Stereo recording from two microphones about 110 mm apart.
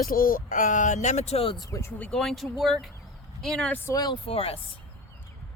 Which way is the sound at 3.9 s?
35° left (ahead or behind).